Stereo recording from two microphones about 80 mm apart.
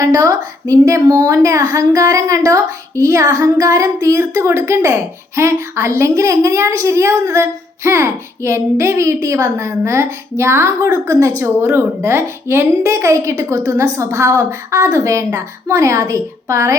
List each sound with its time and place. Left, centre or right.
0.0 s a woman's voice: right